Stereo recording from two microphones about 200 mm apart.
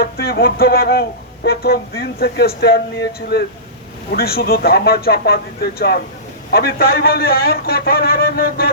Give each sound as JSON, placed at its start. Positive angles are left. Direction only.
{"t": 0.0, "sound": "a man's voice", "side_deg": 50}